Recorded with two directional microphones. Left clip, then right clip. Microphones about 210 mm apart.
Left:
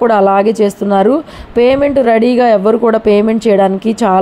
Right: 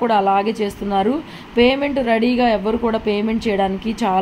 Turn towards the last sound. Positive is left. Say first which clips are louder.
# left 8 dB
turn(degrees=30)  # may be behind; listen again after turning